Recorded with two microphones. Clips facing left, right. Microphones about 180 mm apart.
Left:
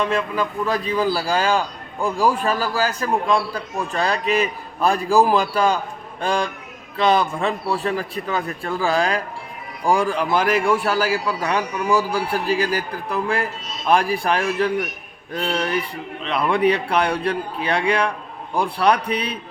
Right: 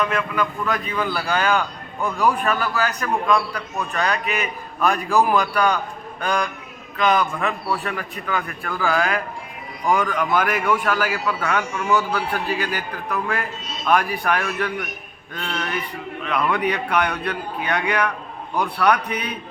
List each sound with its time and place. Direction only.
0.0 s a man's voice: 30° left (ahead or behind)